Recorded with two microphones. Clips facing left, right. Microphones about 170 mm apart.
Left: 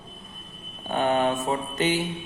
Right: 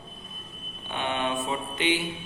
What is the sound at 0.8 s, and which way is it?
Speech, 40° left (ahead or behind).